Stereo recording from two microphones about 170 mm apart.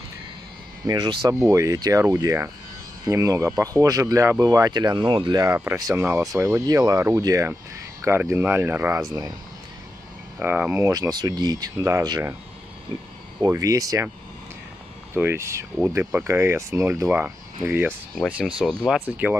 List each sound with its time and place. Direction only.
0.8 s speech: 25° right (ahead or behind)
10.4 s speech: 10° right (ahead or behind)
13.4 s speech: 20° right (ahead or behind)
15.1 s speech: 15° right (ahead or behind)
18.6 s speech: centre (ahead or behind)
19.0 s speech: 10° right (ahead or behind)